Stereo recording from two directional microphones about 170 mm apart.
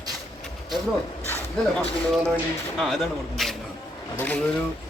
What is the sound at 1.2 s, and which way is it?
Speech, 10° left (ahead or behind).